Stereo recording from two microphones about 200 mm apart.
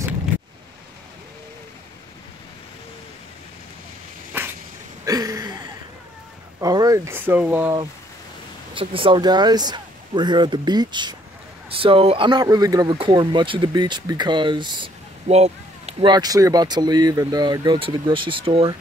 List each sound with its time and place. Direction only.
5.0 s a sound: 20° right (ahead or behind)
6.6 s speech: 20° right (ahead or behind)
8.7 s speech: 25° right (ahead or behind)